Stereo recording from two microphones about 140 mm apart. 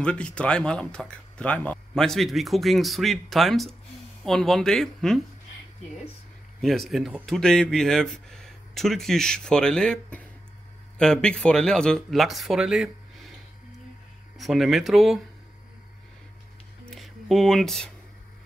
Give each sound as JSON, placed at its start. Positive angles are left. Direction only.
{"t": 0.0, "sound": "speech", "side_deg": 5}
{"t": 6.6, "sound": "speech", "side_deg": 0}
{"t": 14.3, "sound": "speech", "side_deg": 0}
{"t": 16.9, "sound": "speech", "side_deg": 0}